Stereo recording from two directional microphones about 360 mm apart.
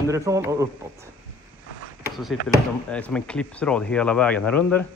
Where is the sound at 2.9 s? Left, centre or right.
Centre.